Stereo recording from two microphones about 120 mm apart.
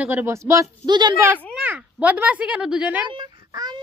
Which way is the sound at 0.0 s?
20° right (ahead or behind).